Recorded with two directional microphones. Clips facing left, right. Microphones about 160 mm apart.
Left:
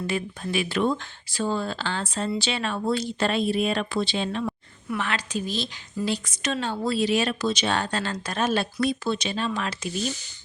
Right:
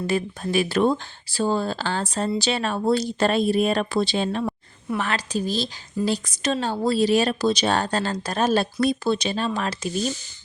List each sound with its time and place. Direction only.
0.1 s speech: 40° right (ahead or behind)